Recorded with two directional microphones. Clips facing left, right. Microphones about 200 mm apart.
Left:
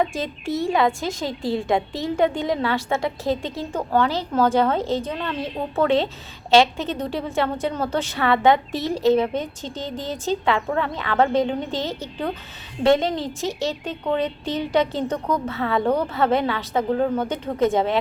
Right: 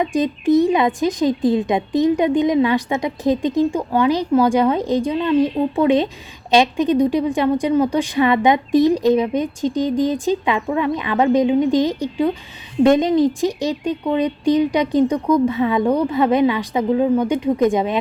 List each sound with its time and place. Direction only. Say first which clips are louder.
0.0 s a woman's voice: right 6 dB; 15° right (ahead or behind)